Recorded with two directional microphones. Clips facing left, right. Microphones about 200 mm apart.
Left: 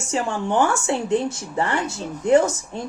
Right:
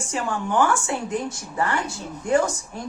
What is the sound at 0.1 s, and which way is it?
Speech, 25° left (ahead or behind).